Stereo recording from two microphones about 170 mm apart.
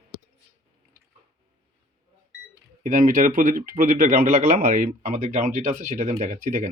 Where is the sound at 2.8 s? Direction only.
50° right (ahead or behind).